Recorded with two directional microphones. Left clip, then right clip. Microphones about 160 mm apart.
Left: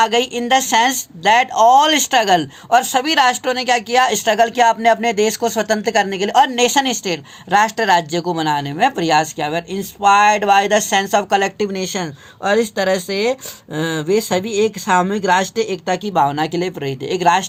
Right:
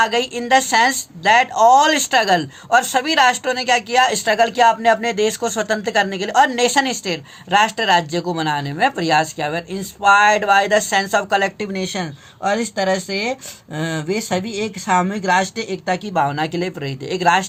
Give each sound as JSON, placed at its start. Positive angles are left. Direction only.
{"t": 0.0, "sound": "a woman's voice", "side_deg": 35}